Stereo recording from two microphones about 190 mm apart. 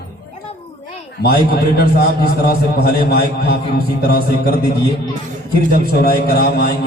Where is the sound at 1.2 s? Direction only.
55° left (ahead or behind).